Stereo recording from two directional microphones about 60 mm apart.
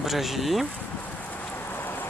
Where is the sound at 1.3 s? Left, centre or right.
Left.